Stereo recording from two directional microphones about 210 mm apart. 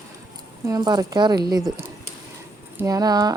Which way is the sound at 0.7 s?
20° right (ahead or behind).